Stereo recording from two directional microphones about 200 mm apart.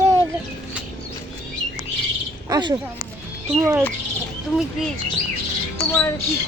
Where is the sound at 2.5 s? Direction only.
20° right (ahead or behind).